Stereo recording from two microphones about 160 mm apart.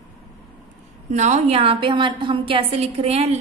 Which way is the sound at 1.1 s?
45° right (ahead or behind).